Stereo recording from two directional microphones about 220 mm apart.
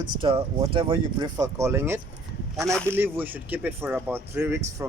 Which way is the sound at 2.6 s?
Centre (ahead or behind).